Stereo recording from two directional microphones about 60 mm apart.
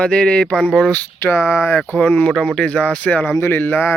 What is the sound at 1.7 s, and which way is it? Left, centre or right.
Speech, left.